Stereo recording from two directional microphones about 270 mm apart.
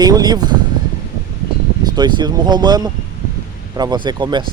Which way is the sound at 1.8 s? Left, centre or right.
Centre.